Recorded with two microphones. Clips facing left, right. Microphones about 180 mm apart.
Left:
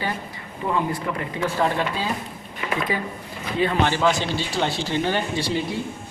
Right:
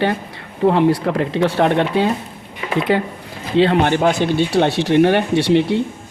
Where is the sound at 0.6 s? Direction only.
80° right.